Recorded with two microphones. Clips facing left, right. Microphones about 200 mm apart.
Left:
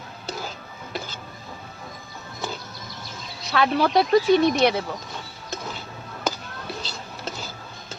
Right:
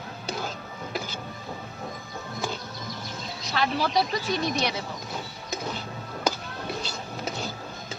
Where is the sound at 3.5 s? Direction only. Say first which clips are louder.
Left 6 dB; 55° left (ahead or behind).